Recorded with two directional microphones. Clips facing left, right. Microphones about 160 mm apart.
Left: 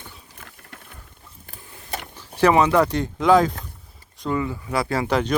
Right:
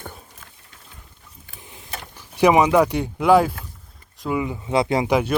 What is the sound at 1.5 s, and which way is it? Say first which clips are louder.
Sewing machine: right 2 dB; 15° right (ahead or behind).